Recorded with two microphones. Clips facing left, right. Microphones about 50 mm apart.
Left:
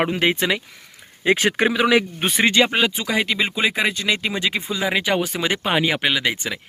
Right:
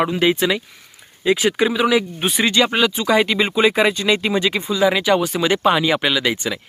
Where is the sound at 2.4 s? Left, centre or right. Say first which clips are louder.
Even; left.